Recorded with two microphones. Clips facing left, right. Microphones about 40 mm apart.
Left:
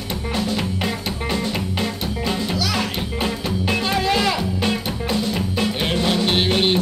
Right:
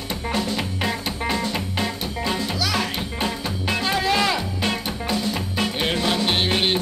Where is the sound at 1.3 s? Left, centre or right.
Centre.